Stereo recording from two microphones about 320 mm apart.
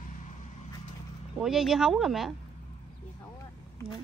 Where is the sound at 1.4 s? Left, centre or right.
Centre.